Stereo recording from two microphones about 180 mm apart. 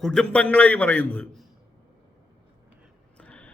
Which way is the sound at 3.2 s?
5° left (ahead or behind).